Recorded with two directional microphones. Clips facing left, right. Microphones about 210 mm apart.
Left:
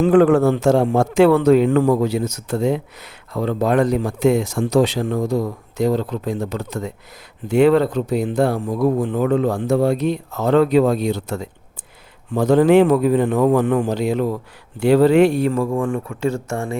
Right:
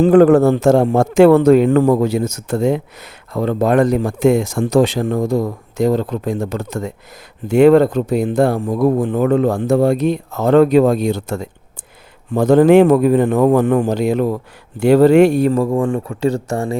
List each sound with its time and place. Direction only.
0.0 s a man's voice: 40° right (ahead or behind)